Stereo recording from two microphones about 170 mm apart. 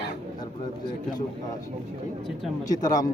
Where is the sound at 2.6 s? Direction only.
20° left (ahead or behind).